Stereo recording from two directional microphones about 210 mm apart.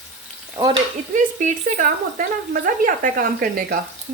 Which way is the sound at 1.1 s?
35° right (ahead or behind).